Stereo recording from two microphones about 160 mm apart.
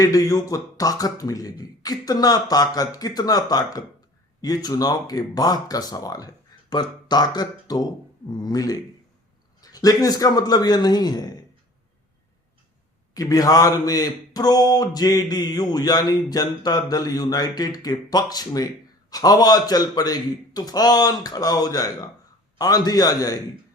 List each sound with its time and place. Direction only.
0.0 s a man's voice: 20° left (ahead or behind)
13.1 s speech: 20° left (ahead or behind)